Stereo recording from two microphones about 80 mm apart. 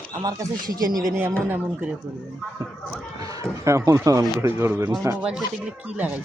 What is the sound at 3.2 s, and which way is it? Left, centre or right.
Speech, right.